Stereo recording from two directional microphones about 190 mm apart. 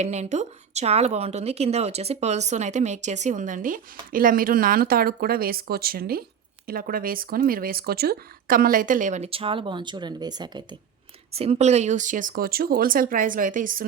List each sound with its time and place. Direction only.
0.0 s a woman's voice: 35° right (ahead or behind)
11.3 s speech: 35° right (ahead or behind)